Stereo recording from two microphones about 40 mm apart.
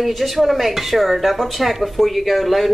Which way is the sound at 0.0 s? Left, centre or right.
Centre.